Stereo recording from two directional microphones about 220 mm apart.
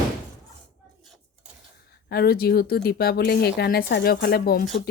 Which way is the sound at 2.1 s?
45° left (ahead or behind).